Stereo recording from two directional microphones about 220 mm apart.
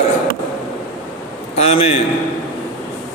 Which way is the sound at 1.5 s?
30° left (ahead or behind).